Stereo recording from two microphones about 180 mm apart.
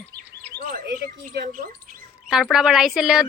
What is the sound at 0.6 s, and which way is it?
A woman's voice, 50° right (ahead or behind).